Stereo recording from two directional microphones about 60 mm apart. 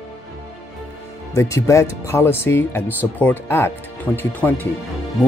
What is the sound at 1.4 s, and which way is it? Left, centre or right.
Speech, left.